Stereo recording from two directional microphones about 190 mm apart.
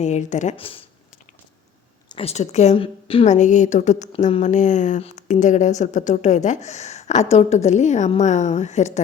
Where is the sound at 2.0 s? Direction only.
30° left (ahead or behind).